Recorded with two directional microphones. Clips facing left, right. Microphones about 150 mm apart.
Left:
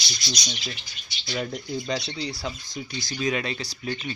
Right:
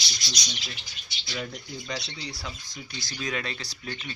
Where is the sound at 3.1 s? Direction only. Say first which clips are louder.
Left 6 dB; 15° left (ahead or behind).